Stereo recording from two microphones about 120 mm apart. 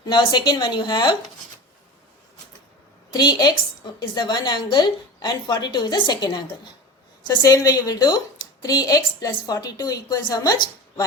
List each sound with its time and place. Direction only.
0.0 s a woman's voice: 40° left (ahead or behind)
3.1 s a woman's voice: 40° left (ahead or behind)